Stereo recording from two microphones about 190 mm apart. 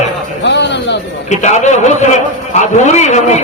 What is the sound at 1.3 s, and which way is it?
A man's voice, 40° left (ahead or behind).